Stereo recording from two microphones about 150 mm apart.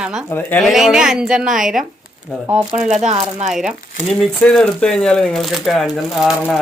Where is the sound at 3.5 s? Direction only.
5° right (ahead or behind).